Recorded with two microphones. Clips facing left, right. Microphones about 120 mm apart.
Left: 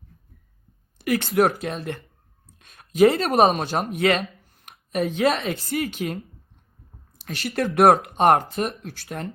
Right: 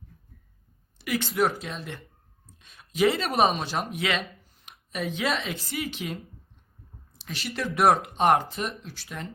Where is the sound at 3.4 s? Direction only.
45° left (ahead or behind).